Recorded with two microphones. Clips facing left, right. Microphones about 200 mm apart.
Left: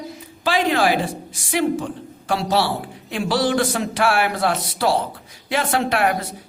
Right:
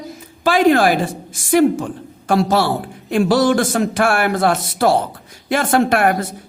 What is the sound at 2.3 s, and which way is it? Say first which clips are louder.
Speech: right 5 dB; 50° right (ahead or behind).